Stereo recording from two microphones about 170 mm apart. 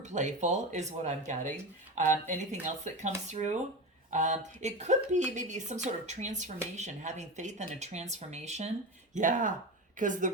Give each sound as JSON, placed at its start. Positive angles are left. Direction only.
{"t": 0.0, "sound": "a woman's voice", "side_deg": -45}